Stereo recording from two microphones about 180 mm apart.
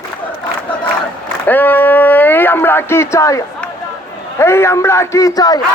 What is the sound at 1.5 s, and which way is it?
Speech, 10° left (ahead or behind).